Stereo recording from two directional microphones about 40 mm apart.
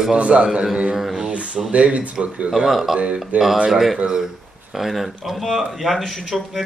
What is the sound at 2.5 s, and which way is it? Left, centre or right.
Speech, centre.